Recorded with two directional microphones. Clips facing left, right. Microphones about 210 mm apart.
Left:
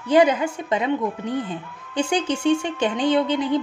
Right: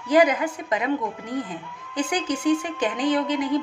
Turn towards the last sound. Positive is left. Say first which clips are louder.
# left 2 dB
turn(degrees=30)  # may be behind; listen again after turning